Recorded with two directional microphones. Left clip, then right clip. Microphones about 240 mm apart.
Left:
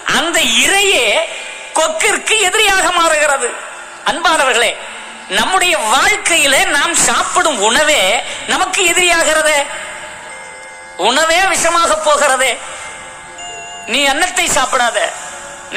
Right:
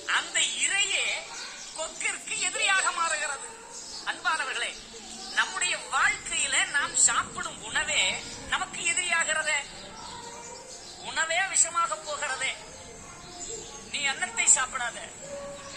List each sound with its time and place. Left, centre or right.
0.1 s a sound: left
1.8 s a woman's voice: left
11.0 s a woman's voice: left
13.9 s a woman's voice: left